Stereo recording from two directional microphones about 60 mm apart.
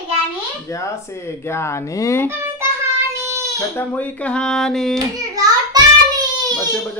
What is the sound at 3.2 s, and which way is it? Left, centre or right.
Goat, right.